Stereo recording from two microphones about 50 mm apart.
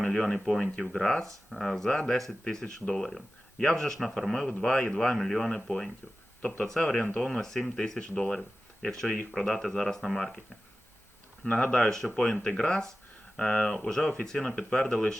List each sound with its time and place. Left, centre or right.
0.0 s speech: centre
11.4 s speech: left
11.8 s speech: centre